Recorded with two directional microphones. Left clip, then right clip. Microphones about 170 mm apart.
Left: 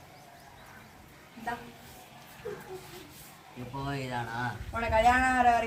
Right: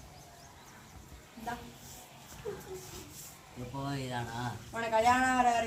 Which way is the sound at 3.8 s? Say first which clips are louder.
Left 3 dB; 10° right (ahead or behind).